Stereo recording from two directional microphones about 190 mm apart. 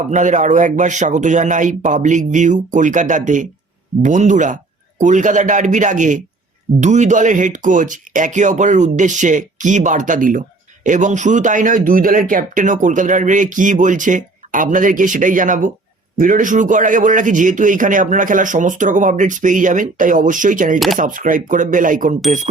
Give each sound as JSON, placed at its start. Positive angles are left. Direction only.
{"t": 0.1, "sound": "a man's voice", "side_deg": -40}
{"t": 20.7, "sound": "speech", "side_deg": 0}
{"t": 21.0, "sound": "a man's voice", "side_deg": -45}